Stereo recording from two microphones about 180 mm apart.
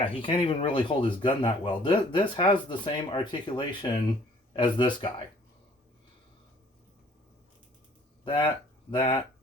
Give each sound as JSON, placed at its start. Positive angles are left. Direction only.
{"t": 0.0, "sound": "speech", "side_deg": 30}
{"t": 8.2, "sound": "speech", "side_deg": 25}